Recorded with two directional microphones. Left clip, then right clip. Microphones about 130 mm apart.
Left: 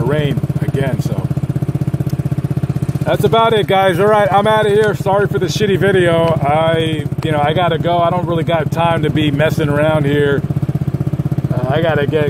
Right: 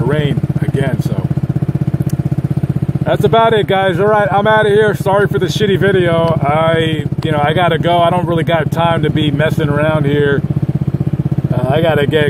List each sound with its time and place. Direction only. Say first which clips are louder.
0.0 s speech: right 1 dB; 5° right (ahead or behind)
3.1 s speech: right 2 dB; 5° right (ahead or behind)
11.7 s speech: right 2 dB; 30° right (ahead or behind)